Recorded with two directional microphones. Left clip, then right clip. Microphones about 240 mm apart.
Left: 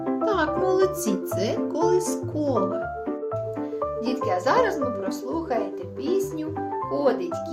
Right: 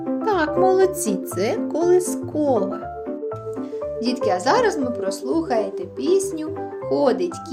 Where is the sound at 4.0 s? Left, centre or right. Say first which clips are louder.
Right 5 dB; right.